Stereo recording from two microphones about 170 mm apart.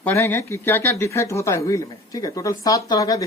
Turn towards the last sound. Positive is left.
turn(degrees=20)  # may be behind; listen again after turning